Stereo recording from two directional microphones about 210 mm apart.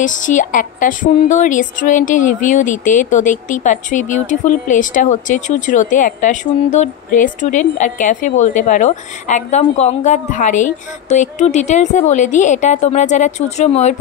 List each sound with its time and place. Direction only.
0.0 s a woman's voice: 35° left (ahead or behind)